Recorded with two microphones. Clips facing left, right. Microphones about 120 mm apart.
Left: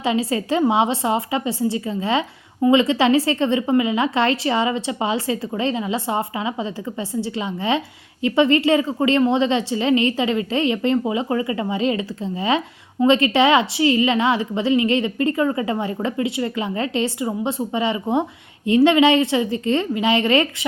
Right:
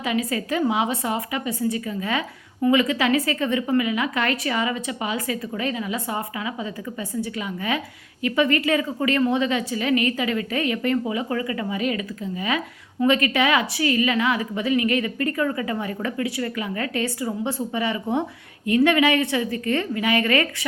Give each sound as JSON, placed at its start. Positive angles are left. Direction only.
{"t": 0.0, "sound": "a woman's voice", "side_deg": 30}